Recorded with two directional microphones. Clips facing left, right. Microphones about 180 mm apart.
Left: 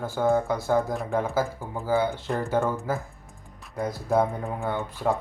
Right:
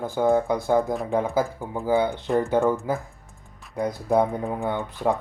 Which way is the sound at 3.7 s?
15° right (ahead or behind).